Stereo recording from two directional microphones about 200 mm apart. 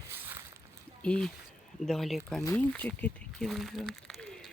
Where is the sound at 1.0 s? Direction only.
5° left (ahead or behind).